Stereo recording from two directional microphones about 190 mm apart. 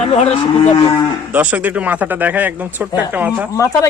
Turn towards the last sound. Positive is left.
turn(degrees=15)  # may be behind; listen again after turning